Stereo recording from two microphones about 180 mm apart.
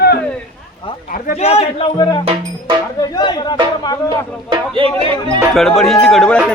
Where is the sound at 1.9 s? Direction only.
20° left (ahead or behind).